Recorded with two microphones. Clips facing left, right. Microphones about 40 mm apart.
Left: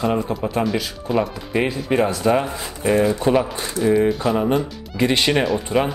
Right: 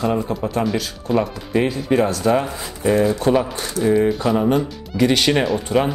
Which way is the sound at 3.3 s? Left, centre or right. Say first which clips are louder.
Even; centre.